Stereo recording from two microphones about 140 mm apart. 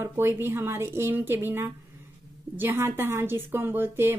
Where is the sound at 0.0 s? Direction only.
15° right (ahead or behind).